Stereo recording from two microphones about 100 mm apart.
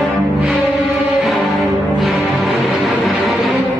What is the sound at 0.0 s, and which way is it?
Music, 5° right (ahead or behind).